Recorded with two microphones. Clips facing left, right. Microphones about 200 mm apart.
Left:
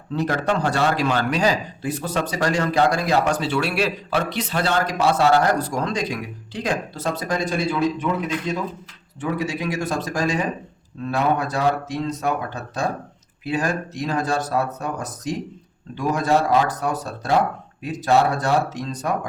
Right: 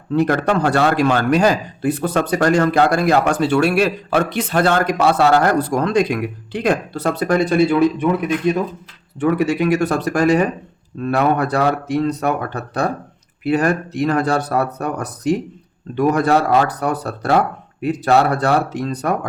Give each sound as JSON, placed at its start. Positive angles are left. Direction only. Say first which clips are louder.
{"t": 0.1, "sound": "a man's voice", "louder": "right 6 dB", "side_deg": -60}